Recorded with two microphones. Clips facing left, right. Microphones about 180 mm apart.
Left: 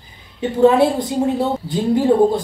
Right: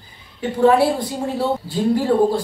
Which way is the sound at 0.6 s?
20° left (ahead or behind).